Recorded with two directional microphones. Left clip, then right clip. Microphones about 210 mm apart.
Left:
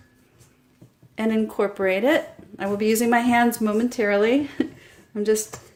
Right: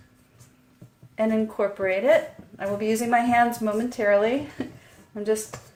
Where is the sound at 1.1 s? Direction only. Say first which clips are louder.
Even; 50° left (ahead or behind).